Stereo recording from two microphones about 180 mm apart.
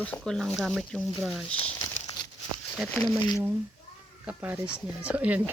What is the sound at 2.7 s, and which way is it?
Speech, centre (ahead or behind).